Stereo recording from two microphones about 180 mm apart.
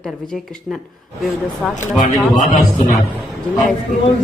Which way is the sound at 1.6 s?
5° left (ahead or behind).